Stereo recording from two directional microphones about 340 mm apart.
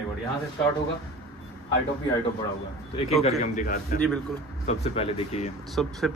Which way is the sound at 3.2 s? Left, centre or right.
Centre.